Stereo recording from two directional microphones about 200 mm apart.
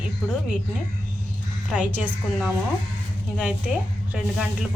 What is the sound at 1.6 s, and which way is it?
Speech, 5° right (ahead or behind).